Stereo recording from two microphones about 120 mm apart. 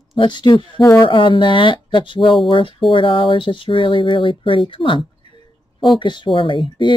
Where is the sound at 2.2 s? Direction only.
Centre (ahead or behind).